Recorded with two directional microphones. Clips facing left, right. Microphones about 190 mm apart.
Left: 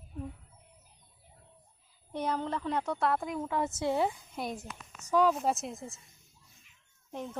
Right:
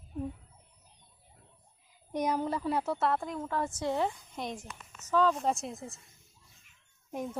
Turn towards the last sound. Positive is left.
turn(degrees=-10)  # may be behind; listen again after turning